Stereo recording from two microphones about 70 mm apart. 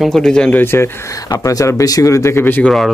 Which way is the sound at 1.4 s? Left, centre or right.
Left.